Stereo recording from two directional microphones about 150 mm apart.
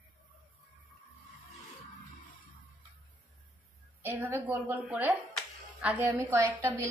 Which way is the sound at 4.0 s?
15° right (ahead or behind).